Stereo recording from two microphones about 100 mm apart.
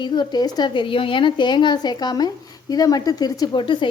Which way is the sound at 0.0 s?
45° left (ahead or behind).